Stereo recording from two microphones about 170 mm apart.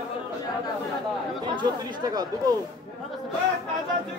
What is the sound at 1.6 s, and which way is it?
Speech, 25° right (ahead or behind).